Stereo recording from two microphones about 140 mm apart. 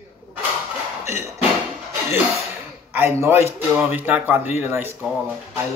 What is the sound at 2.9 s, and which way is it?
Speech, 15° right (ahead or behind).